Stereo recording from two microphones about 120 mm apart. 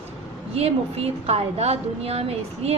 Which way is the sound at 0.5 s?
60° right (ahead or behind).